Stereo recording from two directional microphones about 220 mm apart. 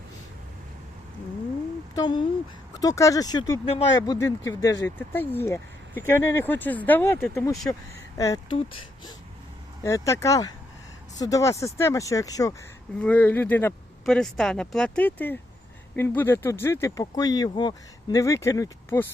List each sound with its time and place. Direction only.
2.0 s speech: 20° left (ahead or behind)
9.8 s speech: 15° left (ahead or behind)